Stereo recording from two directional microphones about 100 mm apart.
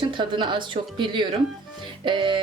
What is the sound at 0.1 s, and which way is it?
A woman's voice, 55° right (ahead or behind).